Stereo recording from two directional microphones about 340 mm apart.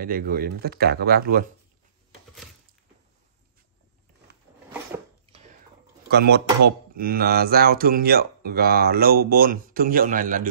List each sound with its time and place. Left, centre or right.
0.0 s speech: right
6.0 s speech: right